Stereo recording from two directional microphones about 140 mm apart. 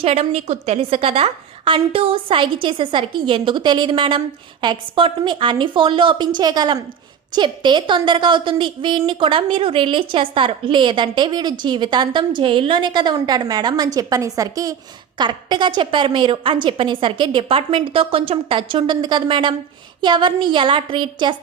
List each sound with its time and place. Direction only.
0.0 s a woman's voice: 50° right (ahead or behind); by 21.3 s 35° right (ahead or behind)